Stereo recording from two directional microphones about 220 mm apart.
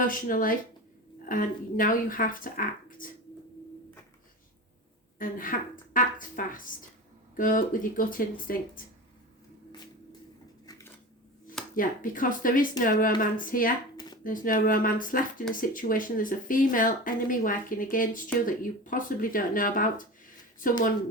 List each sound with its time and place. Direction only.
0.0 s speech: 40° left (ahead or behind)
5.2 s speech: 40° left (ahead or behind)
10.7 s dishes: 15° left (ahead or behind)
11.7 s speech: 40° left (ahead or behind)
13.9 s a sound: 20° left (ahead or behind)
14.3 s speech: 40° left (ahead or behind)